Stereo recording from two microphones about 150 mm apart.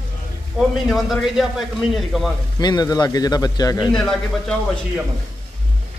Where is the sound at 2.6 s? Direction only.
25° left (ahead or behind).